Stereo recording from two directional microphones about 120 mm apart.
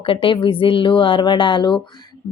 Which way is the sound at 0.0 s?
45° left (ahead or behind).